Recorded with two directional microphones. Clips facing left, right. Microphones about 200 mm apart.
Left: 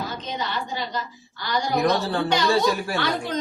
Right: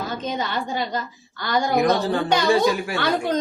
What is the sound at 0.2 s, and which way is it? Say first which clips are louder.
Speech: right 3 dB; 50° right (ahead or behind).